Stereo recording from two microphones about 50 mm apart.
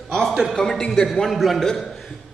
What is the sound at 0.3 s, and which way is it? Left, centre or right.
Speech, centre.